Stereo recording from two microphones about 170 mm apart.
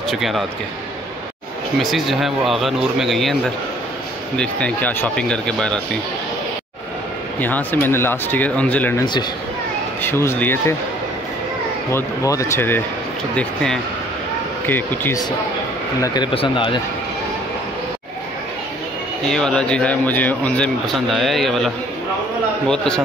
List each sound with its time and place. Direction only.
0.1 s speech: centre (ahead or behind)
1.8 s speech: centre (ahead or behind)
7.3 s speech: 10° left (ahead or behind)
10.0 s speech: 15° left (ahead or behind)
11.9 s speech: 20° left (ahead or behind)
16.3 s speech: 30° left (ahead or behind)
19.3 s speech: 5° left (ahead or behind)